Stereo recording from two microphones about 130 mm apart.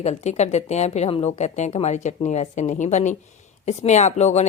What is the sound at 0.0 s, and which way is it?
A woman's voice, 60° left (ahead or behind).